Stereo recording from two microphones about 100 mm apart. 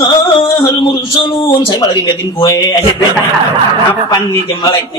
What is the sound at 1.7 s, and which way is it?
A man's voice, 50° left (ahead or behind).